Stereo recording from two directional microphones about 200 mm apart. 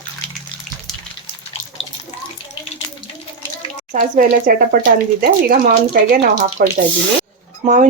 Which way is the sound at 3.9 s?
40° right (ahead or behind).